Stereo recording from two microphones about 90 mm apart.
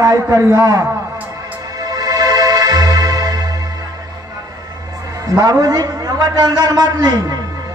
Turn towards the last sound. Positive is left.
turn(degrees=-45)  # may be behind; listen again after turning